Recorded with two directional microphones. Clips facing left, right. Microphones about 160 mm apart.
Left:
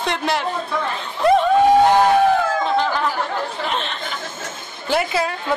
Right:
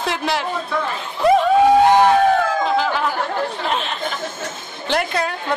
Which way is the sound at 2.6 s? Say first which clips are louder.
Even; centre (ahead or behind).